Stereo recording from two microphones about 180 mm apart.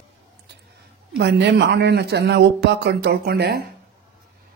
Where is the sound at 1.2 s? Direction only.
70° right (ahead or behind).